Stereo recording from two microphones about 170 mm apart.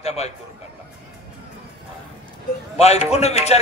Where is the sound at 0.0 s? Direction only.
40° left (ahead or behind).